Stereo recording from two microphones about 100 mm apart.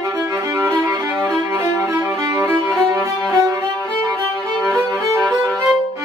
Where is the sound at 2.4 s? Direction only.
25° right (ahead or behind).